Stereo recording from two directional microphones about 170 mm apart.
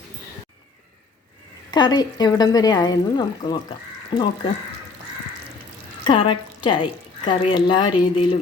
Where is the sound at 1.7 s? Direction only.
25° left (ahead or behind).